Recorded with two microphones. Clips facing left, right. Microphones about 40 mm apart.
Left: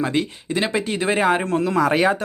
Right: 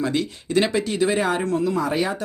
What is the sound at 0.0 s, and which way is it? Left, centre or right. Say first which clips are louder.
Speech: left 2 dB; left.